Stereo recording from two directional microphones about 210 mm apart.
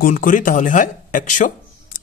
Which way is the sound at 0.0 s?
40° left (ahead or behind).